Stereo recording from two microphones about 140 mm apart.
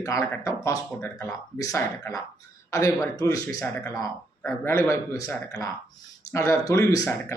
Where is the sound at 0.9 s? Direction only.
10° left (ahead or behind).